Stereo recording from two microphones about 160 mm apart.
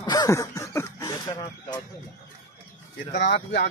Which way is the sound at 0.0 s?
25° left (ahead or behind).